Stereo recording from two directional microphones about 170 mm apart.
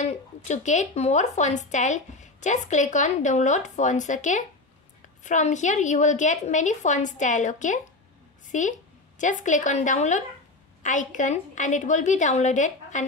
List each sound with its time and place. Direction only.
0.0 s a woman's voice: 40° left (ahead or behind)